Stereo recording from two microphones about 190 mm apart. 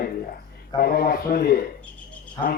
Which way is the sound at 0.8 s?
55° left (ahead or behind).